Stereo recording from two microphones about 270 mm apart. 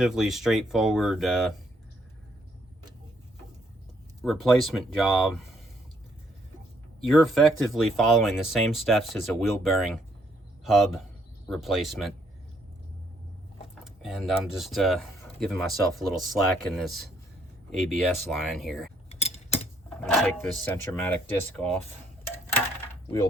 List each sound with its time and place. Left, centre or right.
0.0 s speech: centre
4.2 s speech: centre
7.1 s a man's voice: centre
13.8 s speech: centre
19.0 s mechanisms: left
19.9 s speech: centre